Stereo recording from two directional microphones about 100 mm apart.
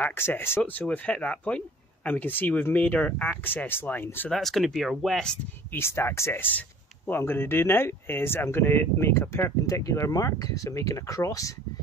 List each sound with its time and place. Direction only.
0.0 s speech: 20° left (ahead or behind)
4.3 s speech: centre (ahead or behind)
5.7 s speech: 25° left (ahead or behind)